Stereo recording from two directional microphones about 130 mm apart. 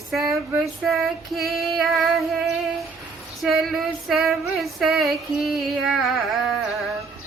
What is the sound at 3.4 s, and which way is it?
Female singing, centre (ahead or behind).